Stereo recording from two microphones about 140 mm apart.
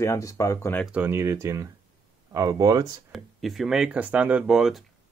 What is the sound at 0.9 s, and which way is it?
Speech, 15° right (ahead or behind).